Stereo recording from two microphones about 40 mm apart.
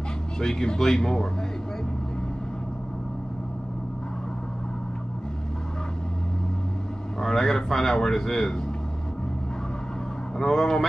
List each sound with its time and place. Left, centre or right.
0.4 s speech: centre
7.2 s speech: centre
10.3 s speech: centre